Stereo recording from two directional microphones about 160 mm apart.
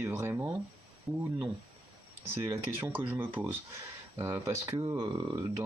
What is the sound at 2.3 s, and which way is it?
Speech, 15° right (ahead or behind).